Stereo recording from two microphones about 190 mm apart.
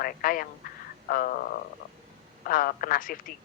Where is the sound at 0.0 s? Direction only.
50° left (ahead or behind).